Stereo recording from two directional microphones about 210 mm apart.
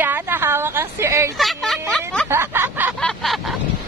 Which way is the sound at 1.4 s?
Centre (ahead or behind).